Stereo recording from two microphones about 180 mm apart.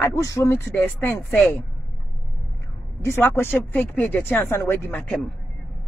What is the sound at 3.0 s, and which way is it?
Speech, 15° left (ahead or behind).